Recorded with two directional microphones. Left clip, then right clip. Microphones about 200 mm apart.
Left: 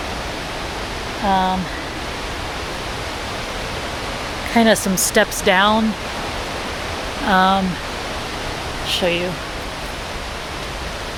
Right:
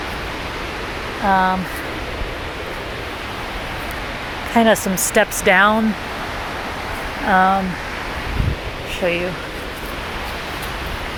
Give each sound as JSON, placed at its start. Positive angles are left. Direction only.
{"t": 1.3, "sound": "speech", "side_deg": -5}
{"t": 4.5, "sound": "speech", "side_deg": 10}
{"t": 5.5, "sound": "speech", "side_deg": -5}
{"t": 7.3, "sound": "speech", "side_deg": 20}